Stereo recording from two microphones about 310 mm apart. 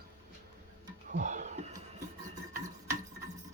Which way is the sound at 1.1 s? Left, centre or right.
Right.